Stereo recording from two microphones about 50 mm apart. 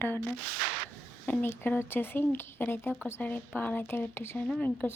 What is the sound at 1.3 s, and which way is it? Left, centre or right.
Speech, left.